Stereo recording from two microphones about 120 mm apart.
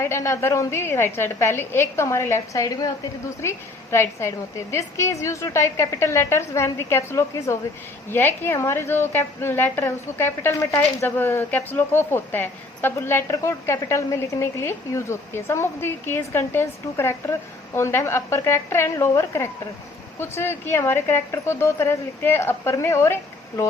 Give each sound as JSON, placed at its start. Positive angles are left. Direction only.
{"t": 0.0, "sound": "a woman's voice", "side_deg": 25}